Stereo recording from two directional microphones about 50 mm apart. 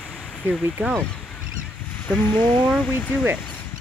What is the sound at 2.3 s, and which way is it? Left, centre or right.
Speech, left.